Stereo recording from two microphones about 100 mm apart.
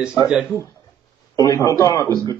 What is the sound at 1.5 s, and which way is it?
Speech, 30° left (ahead or behind).